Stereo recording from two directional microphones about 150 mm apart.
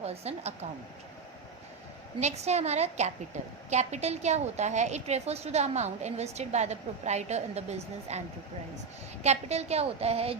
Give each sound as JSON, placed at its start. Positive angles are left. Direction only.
{"t": 0.0, "sound": "a woman's voice", "side_deg": -45}
{"t": 2.2, "sound": "a woman's voice", "side_deg": -45}
{"t": 9.2, "sound": "a woman's voice", "side_deg": -45}